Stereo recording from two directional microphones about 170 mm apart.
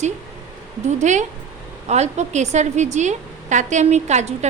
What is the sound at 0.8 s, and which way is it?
A woman's voice, 45° right (ahead or behind).